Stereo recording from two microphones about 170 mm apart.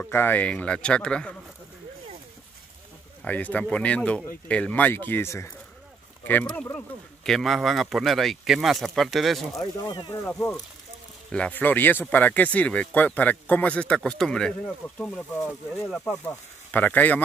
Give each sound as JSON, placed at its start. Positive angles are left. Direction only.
{"t": 0.0, "sound": "speech", "side_deg": 10}
{"t": 3.3, "sound": "speech", "side_deg": 10}
{"t": 9.8, "sound": "speech", "side_deg": 25}
{"t": 10.2, "sound": "speech", "side_deg": 10}